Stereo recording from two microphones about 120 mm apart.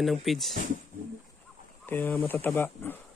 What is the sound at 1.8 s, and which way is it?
Speech, 15° left (ahead or behind).